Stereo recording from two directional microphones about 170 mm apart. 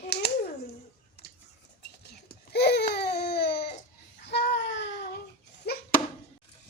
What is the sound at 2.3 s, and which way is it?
Baby cry, 75° left (ahead or behind).